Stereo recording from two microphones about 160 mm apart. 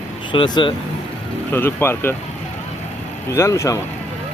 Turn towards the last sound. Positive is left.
turn(degrees=20)  # may be behind; listen again after turning